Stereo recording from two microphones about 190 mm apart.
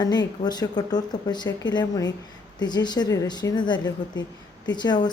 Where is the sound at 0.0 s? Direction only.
20° left (ahead or behind).